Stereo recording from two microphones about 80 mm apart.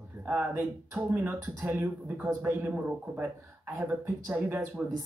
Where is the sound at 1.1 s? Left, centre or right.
Right.